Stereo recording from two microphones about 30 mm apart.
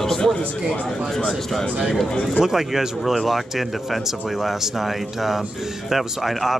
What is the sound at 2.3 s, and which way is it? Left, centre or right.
Speech, centre.